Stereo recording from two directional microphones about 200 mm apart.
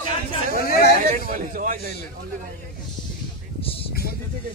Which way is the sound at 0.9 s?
40° right (ahead or behind).